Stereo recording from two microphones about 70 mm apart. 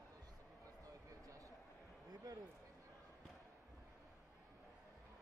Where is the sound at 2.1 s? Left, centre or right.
Right.